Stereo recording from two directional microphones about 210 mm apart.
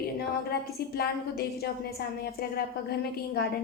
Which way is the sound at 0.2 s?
45° left (ahead or behind).